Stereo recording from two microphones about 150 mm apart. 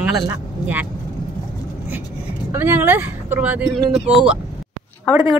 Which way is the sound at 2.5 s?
15° right (ahead or behind).